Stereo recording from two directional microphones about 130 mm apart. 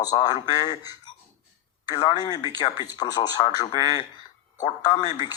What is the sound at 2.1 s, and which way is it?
Speech, 30° left (ahead or behind).